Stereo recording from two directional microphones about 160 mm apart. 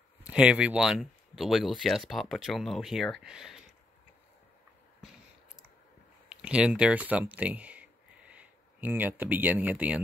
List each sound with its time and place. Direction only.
0.2 s speech: 5° right (ahead or behind)
6.2 s speech: 5° right (ahead or behind)